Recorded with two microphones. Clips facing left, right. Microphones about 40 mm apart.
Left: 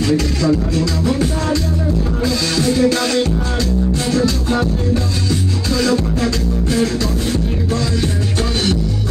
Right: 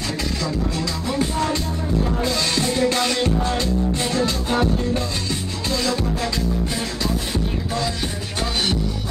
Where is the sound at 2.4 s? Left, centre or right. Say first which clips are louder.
Left 7 dB; right.